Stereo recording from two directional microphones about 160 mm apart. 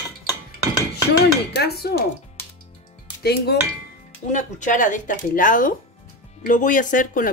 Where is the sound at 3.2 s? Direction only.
85° left.